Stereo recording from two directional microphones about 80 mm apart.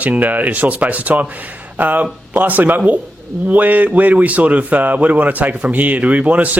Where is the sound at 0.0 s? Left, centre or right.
Centre.